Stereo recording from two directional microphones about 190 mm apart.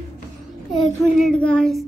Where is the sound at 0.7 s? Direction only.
Centre (ahead or behind).